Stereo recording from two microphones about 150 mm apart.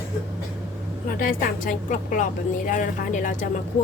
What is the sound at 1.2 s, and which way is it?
Speech, 70° left (ahead or behind).